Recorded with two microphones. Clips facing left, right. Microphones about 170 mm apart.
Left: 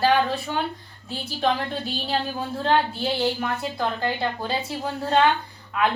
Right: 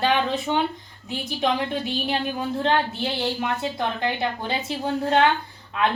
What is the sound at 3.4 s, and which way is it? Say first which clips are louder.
A woman's voice: right 1 dB; 20° right (ahead or behind).